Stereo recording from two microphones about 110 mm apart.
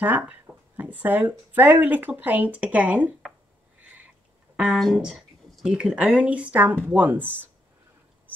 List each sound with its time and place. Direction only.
0.0 s speech: 15° right (ahead or behind)
4.7 s speech: 5° right (ahead or behind)